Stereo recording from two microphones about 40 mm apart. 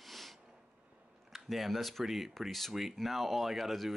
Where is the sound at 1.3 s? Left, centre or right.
Centre.